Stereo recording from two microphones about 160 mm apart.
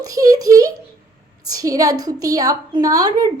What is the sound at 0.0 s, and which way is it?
A child's voice, 20° right (ahead or behind).